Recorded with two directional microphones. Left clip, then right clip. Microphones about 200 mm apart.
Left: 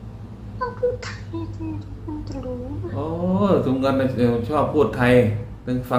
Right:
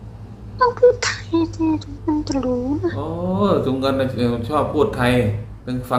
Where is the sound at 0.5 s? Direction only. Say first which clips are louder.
Right 10 dB; 45° right (ahead or behind).